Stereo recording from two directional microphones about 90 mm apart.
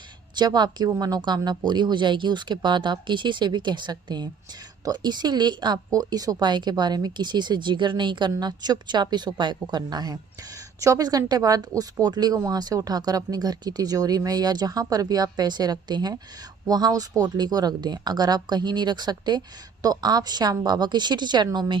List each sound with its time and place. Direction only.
0.3 s a woman's voice: 50° right (ahead or behind)